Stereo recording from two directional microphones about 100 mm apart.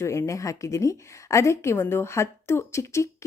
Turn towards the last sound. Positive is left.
turn(degrees=30)  # may be behind; listen again after turning